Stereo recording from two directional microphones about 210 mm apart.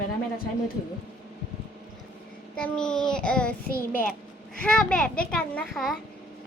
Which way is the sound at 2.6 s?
5° left (ahead or behind).